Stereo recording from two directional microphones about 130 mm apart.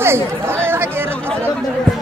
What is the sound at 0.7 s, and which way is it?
Chatter, 20° right (ahead or behind).